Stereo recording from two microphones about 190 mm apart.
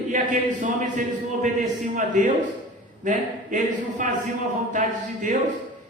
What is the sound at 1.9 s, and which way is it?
Speech, 45° right (ahead or behind).